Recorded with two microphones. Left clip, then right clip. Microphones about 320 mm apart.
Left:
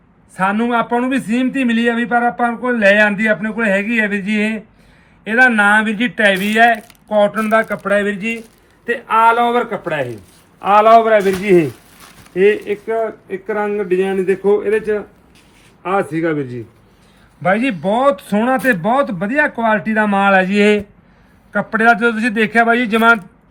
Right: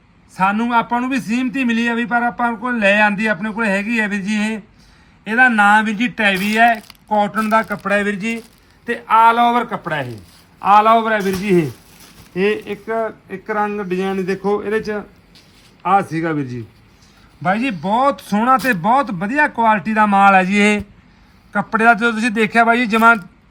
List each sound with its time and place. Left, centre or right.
0.3 s speech: centre
12.3 s speech: centre